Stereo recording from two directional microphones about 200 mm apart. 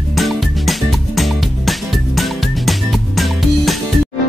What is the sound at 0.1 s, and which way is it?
Music, centre (ahead or behind).